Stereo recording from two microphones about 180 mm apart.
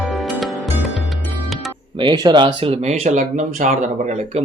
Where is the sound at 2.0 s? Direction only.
25° right (ahead or behind).